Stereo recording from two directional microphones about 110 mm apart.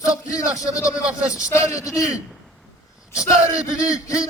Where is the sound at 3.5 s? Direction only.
30° left (ahead or behind).